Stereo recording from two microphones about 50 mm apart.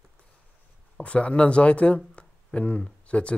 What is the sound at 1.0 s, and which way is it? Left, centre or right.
Speech, left.